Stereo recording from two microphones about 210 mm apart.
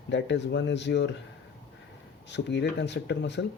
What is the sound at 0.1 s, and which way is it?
Speech, 60° left (ahead or behind).